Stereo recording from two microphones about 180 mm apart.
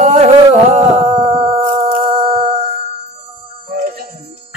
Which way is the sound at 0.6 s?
40° right (ahead or behind).